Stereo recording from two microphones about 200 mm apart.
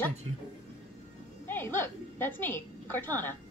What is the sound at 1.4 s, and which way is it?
A woman's voice, 10° left (ahead or behind).